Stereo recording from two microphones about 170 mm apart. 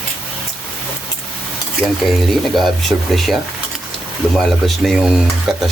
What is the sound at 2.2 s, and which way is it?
Stir, centre (ahead or behind).